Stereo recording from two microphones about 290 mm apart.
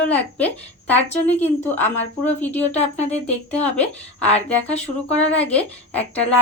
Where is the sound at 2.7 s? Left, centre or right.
Left.